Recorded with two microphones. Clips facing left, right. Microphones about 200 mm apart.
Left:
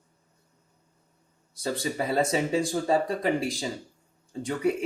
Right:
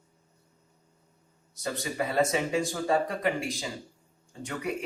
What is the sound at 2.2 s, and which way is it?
A man's voice, 30° left (ahead or behind).